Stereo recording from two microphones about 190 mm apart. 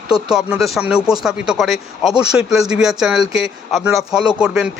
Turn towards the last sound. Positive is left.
turn(degrees=-5)  # may be behind; listen again after turning